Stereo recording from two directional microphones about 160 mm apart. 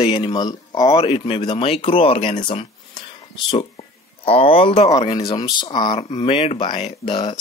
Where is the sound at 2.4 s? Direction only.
35° left (ahead or behind).